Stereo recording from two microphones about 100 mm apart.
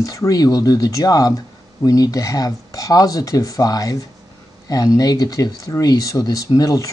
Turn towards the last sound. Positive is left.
turn(degrees=35)  # may be behind; listen again after turning